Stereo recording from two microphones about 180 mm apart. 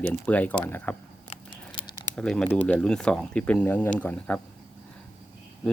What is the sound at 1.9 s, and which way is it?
Speech, 5° left (ahead or behind).